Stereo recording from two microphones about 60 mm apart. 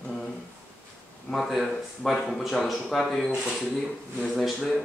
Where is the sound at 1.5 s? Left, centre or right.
Centre.